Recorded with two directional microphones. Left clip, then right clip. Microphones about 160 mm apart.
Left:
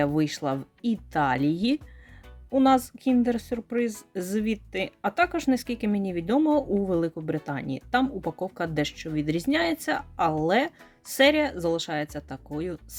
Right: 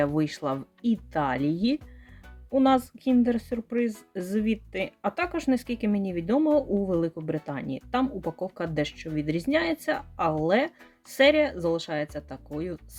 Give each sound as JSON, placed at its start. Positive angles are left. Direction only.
{"t": 0.0, "sound": "speech", "side_deg": 25}